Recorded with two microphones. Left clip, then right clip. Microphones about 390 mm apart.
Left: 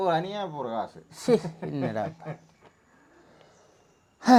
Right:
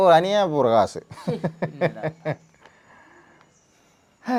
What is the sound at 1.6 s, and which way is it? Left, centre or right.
Speech, right.